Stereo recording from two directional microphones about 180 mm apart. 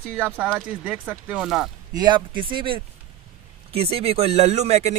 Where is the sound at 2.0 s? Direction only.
25° right (ahead or behind).